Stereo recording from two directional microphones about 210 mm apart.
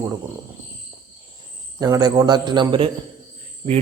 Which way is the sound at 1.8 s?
20° right (ahead or behind).